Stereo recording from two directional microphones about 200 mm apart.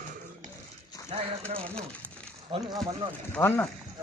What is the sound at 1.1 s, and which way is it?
Speech, 30° right (ahead or behind).